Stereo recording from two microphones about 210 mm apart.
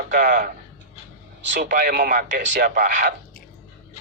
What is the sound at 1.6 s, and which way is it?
A man's voice, 45° right (ahead or behind).